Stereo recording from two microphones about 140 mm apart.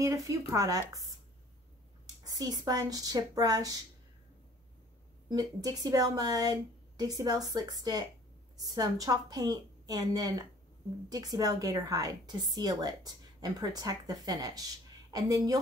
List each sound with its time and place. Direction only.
0.0 s a woman's voice: 20° right (ahead or behind)
2.2 s a woman's voice: 30° right (ahead or behind)
5.3 s a woman's voice: 25° right (ahead or behind)